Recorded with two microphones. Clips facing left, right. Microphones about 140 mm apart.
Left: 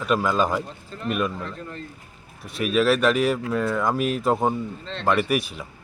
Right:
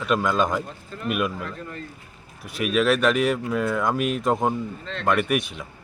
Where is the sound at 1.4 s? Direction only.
30° left (ahead or behind).